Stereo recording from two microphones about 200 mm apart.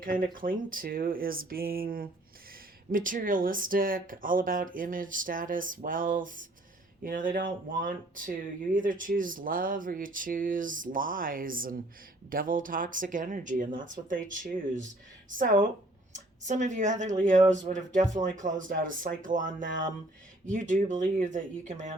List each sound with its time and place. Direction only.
0.0 s speech: 45° right (ahead or behind)